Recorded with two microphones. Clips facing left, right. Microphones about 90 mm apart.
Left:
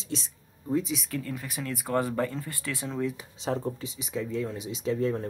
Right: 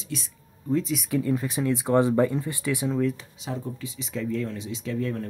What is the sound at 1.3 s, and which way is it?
Speech, 30° right (ahead or behind).